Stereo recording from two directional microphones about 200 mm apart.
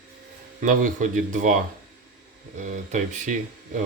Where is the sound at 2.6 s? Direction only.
40° right (ahead or behind).